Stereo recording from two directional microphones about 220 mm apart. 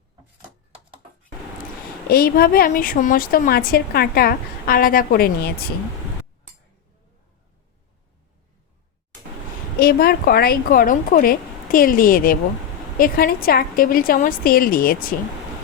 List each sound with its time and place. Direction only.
2.0 s a woman's voice: 45° left (ahead or behind)
9.7 s speech: 45° left (ahead or behind)